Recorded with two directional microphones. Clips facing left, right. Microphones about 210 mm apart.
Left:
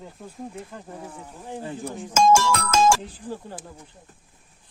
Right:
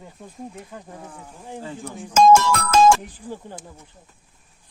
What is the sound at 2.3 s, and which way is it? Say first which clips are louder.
Music: right 3 dB; 60° right (ahead or behind).